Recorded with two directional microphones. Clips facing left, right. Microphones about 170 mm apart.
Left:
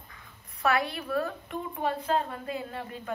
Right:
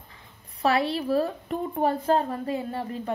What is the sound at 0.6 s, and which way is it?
A woman's voice, 30° right (ahead or behind).